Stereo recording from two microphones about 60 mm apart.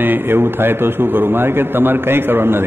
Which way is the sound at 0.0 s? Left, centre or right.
Right.